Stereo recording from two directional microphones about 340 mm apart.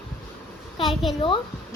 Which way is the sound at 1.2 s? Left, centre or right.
Centre.